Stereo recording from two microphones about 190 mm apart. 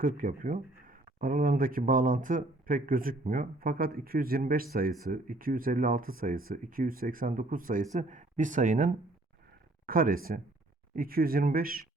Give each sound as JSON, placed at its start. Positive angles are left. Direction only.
{"t": 0.0, "sound": "speech", "side_deg": -45}